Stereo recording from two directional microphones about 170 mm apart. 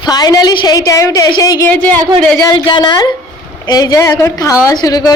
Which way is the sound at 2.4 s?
25° left (ahead or behind).